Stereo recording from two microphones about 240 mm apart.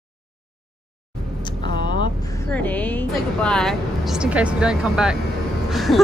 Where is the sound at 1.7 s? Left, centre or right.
Centre.